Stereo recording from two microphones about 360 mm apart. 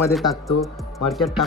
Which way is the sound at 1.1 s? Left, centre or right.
Centre.